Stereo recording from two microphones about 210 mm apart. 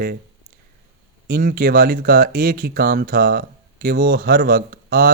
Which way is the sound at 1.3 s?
45° right (ahead or behind).